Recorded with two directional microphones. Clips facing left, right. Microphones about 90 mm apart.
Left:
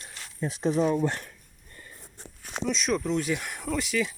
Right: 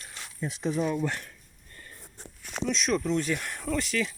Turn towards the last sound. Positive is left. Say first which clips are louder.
# left 1 dB
turn(degrees=5)  # may be behind; listen again after turning